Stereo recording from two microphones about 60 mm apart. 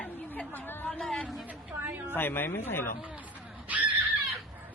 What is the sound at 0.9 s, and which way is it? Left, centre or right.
Speech, centre.